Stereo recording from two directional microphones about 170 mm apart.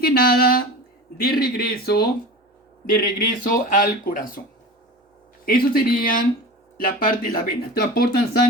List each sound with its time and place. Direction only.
0.0 s speech: 60° left (ahead or behind)
5.5 s speech: 55° left (ahead or behind)